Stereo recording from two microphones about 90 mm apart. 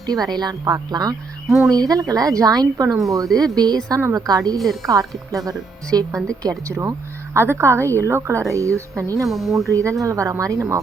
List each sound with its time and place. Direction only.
0.0 s speech: 45° right (ahead or behind)
1.5 s speech: centre (ahead or behind)
1.7 s speech: 45° right (ahead or behind)
4.6 s speech: centre (ahead or behind)
4.9 s a woman's voice: 40° right (ahead or behind)
9.3 s speech: centre (ahead or behind)
9.6 s speech: 35° right (ahead or behind)